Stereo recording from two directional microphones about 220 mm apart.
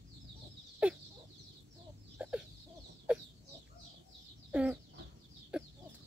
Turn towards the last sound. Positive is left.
turn(degrees=-5)  # may be behind; listen again after turning